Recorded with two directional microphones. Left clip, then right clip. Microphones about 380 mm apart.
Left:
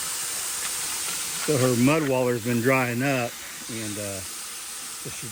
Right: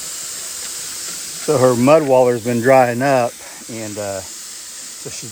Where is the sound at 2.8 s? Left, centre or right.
Right.